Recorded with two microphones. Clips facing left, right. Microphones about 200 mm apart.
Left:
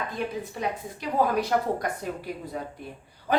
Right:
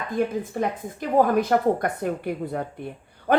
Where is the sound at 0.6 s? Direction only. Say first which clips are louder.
Right 5 dB; 50° right (ahead or behind).